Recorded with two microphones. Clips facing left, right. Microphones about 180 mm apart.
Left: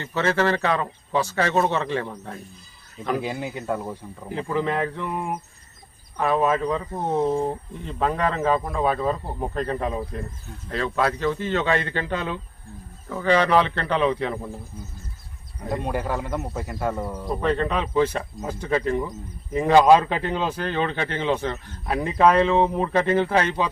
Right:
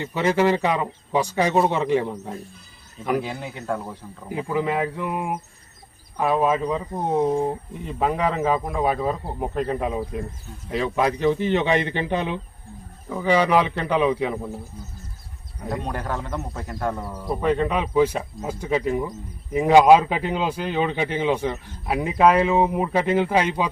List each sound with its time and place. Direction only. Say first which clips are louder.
0.0 s speech: right 2 dB; 15° right (ahead or behind)
3.2 s speech: left 1 dB; 10° left (ahead or behind)
4.3 s speech: right 1 dB; 10° right (ahead or behind)
15.8 s speech: left 5 dB; 10° left (ahead or behind)
17.2 s speech: right 2 dB; 10° right (ahead or behind)